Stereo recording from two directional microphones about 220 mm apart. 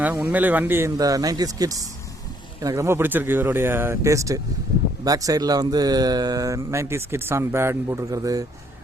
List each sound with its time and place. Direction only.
0.0 s speech: 10° right (ahead or behind)